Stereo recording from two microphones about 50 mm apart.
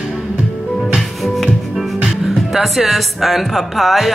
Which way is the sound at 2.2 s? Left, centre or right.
Centre.